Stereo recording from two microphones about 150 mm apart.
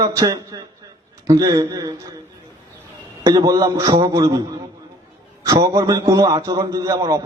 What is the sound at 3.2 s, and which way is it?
A man's voice, 25° right (ahead or behind).